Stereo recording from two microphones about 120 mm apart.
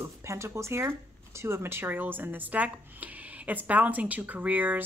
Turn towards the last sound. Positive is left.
turn(degrees=-15)  # may be behind; listen again after turning